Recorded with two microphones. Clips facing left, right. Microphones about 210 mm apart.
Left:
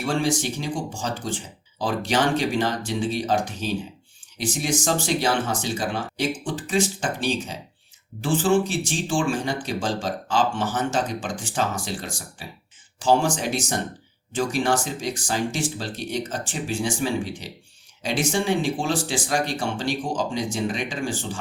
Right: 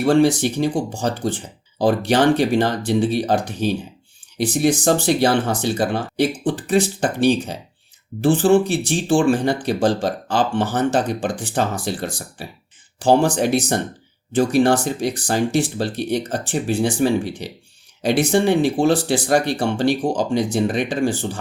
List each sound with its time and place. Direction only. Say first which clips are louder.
0.0 s speech: right 9 dB; 60° right (ahead or behind)